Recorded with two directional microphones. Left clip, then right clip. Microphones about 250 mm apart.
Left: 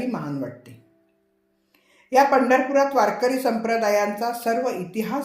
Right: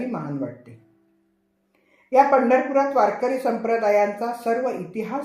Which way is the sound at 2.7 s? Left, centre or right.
Left.